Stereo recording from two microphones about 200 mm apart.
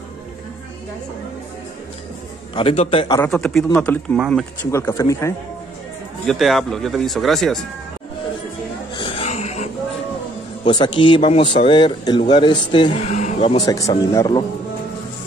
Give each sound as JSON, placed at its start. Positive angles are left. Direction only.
{"t": 2.5, "sound": "speech", "side_deg": 30}
{"t": 3.3, "sound": "speech", "side_deg": 5}
{"t": 6.2, "sound": "speech", "side_deg": 0}
{"t": 8.9, "sound": "a sound", "side_deg": 25}
{"t": 10.6, "sound": "speech", "side_deg": 20}
{"t": 13.1, "sound": "speech", "side_deg": 35}
{"t": 13.7, "sound": "speech", "side_deg": 15}